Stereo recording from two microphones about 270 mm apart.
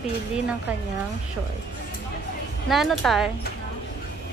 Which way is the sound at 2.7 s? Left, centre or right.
Centre.